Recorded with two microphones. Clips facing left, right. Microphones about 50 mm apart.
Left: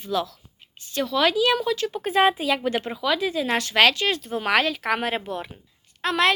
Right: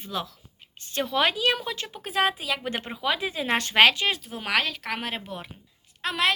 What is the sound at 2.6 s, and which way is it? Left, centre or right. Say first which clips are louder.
A woman's voice: left 4 dB; right.